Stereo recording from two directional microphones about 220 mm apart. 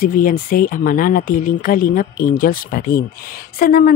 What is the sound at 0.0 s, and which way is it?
Speech, 40° left (ahead or behind).